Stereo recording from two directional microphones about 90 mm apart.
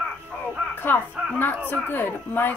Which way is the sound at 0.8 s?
20° left (ahead or behind).